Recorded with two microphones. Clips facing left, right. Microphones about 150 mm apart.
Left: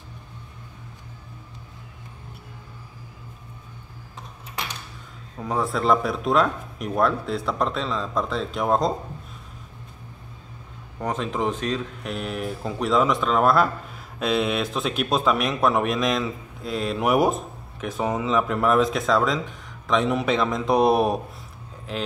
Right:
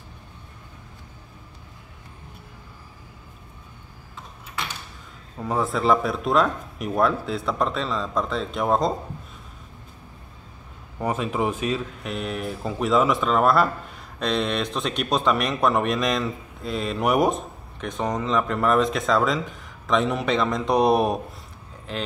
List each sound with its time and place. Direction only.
5.4 s speech: centre (ahead or behind)
11.0 s speech: 10° right (ahead or behind)